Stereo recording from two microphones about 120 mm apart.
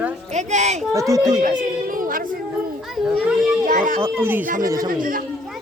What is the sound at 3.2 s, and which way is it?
Children playing, 5° right (ahead or behind).